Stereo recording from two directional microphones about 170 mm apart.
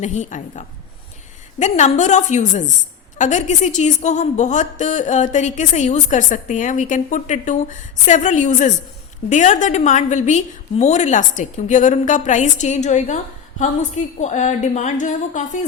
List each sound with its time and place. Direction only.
0.0 s a woman's voice: 45° left (ahead or behind)